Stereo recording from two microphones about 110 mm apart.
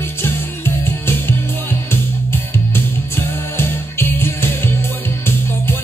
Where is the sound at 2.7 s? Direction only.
20° left (ahead or behind).